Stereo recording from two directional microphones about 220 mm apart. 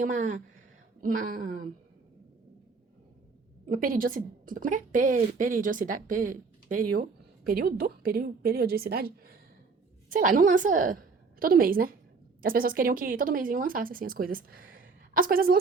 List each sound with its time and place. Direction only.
0.0 s speech: 35° right (ahead or behind)
3.7 s a woman's voice: 40° right (ahead or behind)